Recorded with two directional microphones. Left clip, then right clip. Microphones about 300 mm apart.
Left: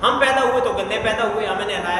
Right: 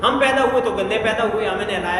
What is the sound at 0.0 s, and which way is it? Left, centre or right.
A man's voice, centre.